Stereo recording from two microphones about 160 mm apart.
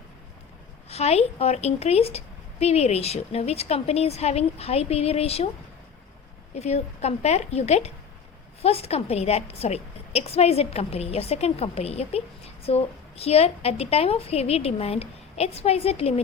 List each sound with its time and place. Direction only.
0.9 s a woman's voice: 40° left (ahead or behind)
6.5 s a woman's voice: 45° left (ahead or behind)